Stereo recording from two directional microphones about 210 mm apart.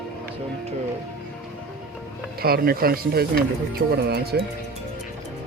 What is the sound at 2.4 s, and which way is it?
Speech, 45° right (ahead or behind).